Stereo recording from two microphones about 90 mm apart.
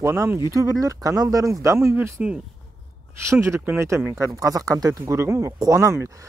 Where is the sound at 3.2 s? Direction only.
30° right (ahead or behind).